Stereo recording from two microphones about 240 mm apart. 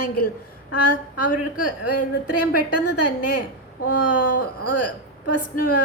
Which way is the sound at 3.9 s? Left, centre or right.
Left.